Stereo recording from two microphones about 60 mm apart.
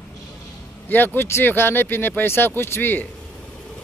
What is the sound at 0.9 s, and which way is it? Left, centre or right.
Speech, left.